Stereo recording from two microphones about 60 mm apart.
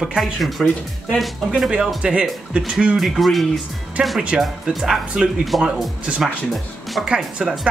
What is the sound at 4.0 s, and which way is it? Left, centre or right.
Speech, centre.